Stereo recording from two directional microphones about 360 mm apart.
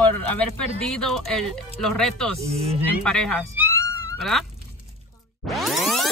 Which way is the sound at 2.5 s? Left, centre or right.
Centre.